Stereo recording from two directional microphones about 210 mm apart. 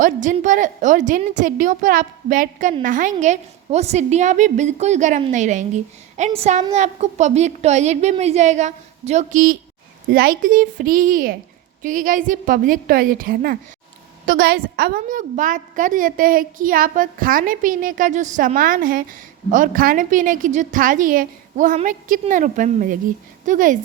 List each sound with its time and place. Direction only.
0.0 s a woman's voice: 35° right (ahead or behind)